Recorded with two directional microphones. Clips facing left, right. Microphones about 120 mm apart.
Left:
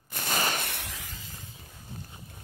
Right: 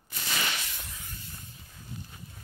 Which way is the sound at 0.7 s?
85° left.